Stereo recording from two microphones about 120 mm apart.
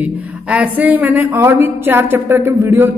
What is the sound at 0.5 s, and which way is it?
A woman's voice, 15° right (ahead or behind).